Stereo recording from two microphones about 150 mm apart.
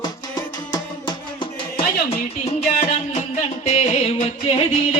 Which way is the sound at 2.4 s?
50° left (ahead or behind).